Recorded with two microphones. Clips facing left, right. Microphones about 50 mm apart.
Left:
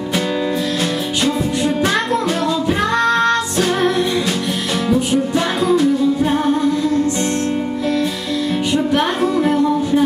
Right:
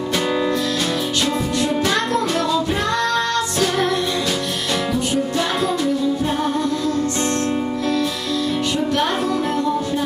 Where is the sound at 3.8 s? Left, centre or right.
Centre.